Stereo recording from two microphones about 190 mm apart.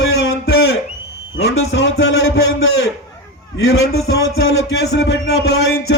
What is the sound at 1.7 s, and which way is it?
Music, 80° left.